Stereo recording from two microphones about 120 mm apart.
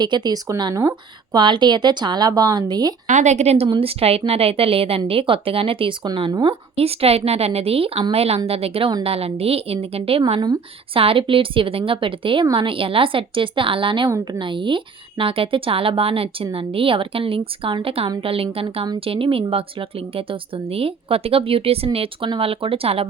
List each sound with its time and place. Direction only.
0.0 s a woman's voice: 35° right (ahead or behind)
3.1 s a woman's voice: 80° right; by 3.7 s 65° right (ahead or behind)
3.7 s a woman's voice: 55° right (ahead or behind)